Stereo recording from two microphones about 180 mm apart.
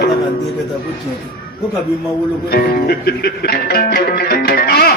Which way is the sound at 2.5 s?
60° left (ahead or behind).